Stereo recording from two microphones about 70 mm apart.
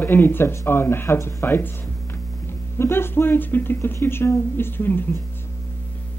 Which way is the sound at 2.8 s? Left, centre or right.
Left.